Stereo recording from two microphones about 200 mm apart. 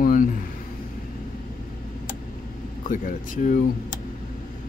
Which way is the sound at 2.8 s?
45° left (ahead or behind).